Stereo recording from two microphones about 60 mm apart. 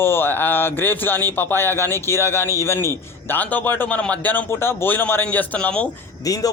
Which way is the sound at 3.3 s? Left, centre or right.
Left.